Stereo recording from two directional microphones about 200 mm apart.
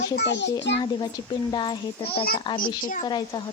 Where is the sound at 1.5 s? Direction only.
20° left (ahead or behind).